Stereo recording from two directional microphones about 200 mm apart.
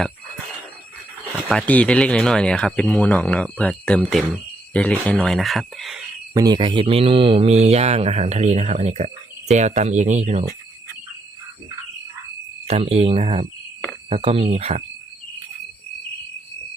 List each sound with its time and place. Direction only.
1.5 s speech: 5° left (ahead or behind)
6.3 s speech: 20° right (ahead or behind)
12.6 s speech: 30° right (ahead or behind)